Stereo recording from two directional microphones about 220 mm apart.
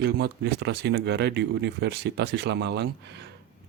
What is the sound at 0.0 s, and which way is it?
Speech, 50° right (ahead or behind).